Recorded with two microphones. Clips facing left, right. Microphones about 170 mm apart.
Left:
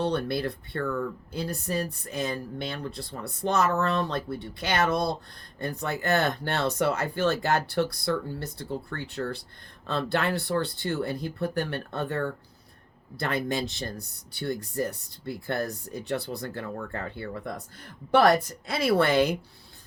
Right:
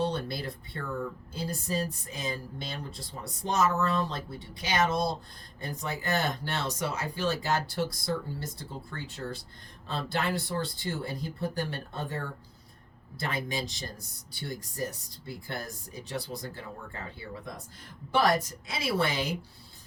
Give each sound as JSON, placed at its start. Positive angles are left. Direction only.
{"t": 0.0, "sound": "speech", "side_deg": 65}
{"t": 18.7, "sound": "speech", "side_deg": 60}